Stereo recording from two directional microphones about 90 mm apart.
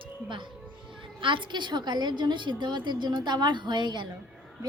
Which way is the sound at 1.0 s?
70° right (ahead or behind).